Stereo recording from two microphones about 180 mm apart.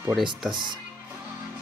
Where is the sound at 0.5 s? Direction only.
25° right (ahead or behind).